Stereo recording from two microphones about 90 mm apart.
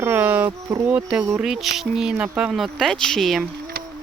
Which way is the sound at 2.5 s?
Centre (ahead or behind).